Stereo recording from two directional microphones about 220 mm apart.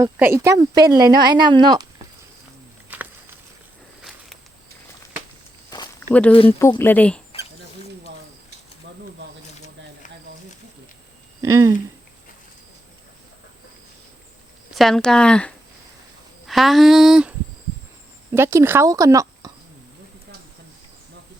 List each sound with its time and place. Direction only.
0.0 s speech: 10° right (ahead or behind)
2.9 s a sound: 10° right (ahead or behind)
5.7 s walk: 15° left (ahead or behind)
6.6 s speech: 10° left (ahead or behind)
11.4 s speech: 15° right (ahead or behind)
14.7 s speech: centre (ahead or behind)
18.3 s speech: 10° right (ahead or behind)